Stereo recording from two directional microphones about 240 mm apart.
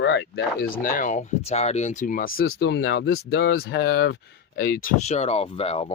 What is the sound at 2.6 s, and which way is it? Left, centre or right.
Speech, left.